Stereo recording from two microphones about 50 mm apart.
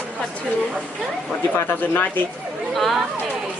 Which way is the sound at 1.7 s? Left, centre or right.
Left.